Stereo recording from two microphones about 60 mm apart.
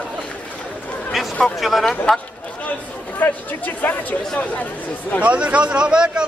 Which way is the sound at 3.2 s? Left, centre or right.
Left.